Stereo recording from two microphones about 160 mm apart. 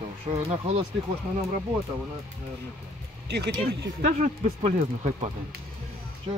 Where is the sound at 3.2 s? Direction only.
90° right.